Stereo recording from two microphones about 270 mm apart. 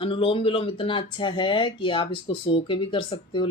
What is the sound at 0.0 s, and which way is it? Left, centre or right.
Speech, centre.